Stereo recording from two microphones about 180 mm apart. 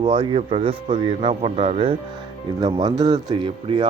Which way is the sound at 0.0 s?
25° right (ahead or behind).